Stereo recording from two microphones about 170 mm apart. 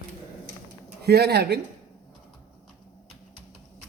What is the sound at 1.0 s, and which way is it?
Speech, 70° right (ahead or behind).